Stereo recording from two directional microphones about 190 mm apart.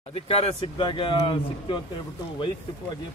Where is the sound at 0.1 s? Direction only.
30° left (ahead or behind).